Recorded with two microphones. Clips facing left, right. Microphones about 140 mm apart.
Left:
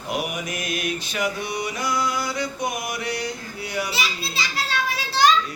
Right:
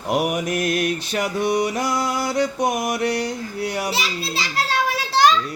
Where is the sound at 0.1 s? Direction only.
70° right (ahead or behind).